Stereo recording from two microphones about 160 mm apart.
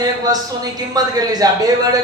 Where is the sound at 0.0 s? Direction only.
25° right (ahead or behind).